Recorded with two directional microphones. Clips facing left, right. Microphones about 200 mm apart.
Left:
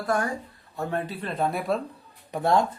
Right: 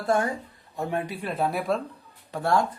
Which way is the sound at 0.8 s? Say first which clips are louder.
Even; 15° right (ahead or behind).